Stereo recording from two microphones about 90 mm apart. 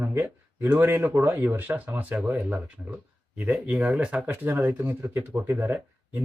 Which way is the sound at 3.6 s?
15° right (ahead or behind).